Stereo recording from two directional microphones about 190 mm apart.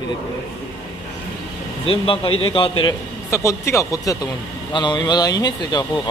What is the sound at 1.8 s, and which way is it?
Speech, 30° left (ahead or behind).